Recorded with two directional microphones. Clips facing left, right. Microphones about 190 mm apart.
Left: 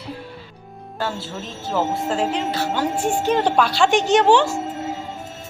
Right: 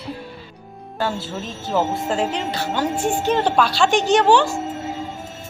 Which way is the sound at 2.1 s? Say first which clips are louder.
Even; 5° left (ahead or behind).